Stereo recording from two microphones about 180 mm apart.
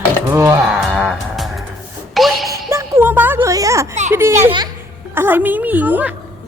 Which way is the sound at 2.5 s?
15° right (ahead or behind).